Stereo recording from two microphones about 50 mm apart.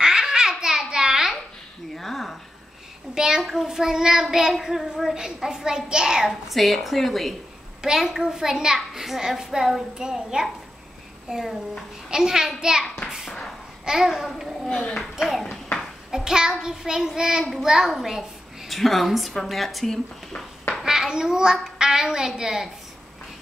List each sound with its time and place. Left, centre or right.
0.0 s babbling: centre
2.0 s a sound: centre
3.2 s child singing: centre
6.5 s a woman's voice: centre
7.8 s child singing: centre
12.8 s a child's voice: centre
13.1 s a sound: centre
13.8 s child singing: centre
14.7 s a child's voice: centre
15.1 s child singing: centre
18.7 s a woman's voice: centre
20.8 s child singing: centre